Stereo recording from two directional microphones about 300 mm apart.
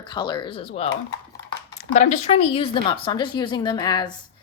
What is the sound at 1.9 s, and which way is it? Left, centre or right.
A woman's voice, left.